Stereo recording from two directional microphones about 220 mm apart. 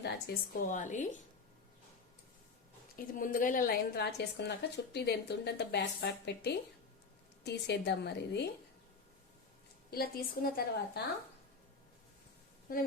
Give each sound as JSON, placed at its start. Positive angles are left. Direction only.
{"t": 0.0, "sound": "a woman's voice", "side_deg": 40}
{"t": 2.9, "sound": "a woman's voice", "side_deg": 40}
{"t": 9.9, "sound": "a woman's voice", "side_deg": 40}
{"t": 12.7, "sound": "a woman's voice", "side_deg": 40}